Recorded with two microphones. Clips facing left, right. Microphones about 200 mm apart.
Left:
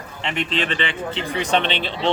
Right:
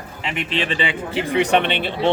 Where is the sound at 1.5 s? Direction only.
55° right (ahead or behind).